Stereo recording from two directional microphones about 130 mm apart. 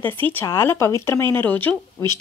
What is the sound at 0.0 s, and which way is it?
Speech, 15° left (ahead or behind).